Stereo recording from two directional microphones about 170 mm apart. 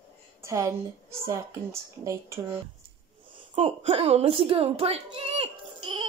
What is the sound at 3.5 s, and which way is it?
A child's voice, 40° right (ahead or behind).